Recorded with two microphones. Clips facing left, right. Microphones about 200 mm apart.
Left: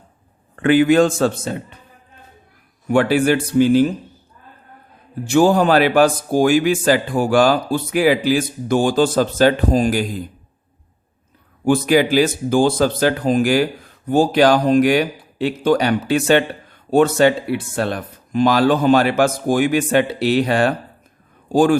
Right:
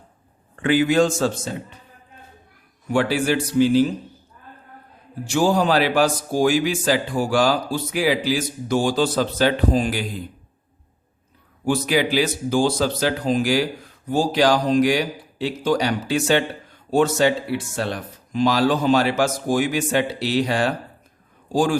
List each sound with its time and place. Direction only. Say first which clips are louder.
0.5 s speech: left 5 dB; 55° left (ahead or behind)
2.9 s speech: left 5 dB; 55° left (ahead or behind)
5.2 s speech: left 5 dB; 55° left (ahead or behind)
11.6 s speech: left 5 dB; 55° left (ahead or behind)